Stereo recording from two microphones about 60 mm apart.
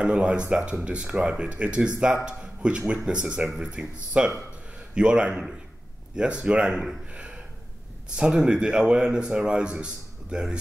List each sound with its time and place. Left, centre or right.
0.0 s a man's voice: centre
7.1 s a sound: right
8.2 s speech: centre